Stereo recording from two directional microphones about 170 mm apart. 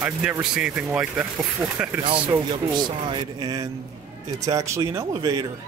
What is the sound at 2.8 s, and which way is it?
Speech, 30° right (ahead or behind).